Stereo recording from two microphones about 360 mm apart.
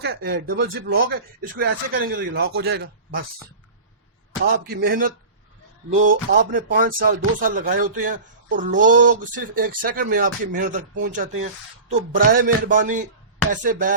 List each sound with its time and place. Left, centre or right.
0.0 s speech: right
4.5 s speech: right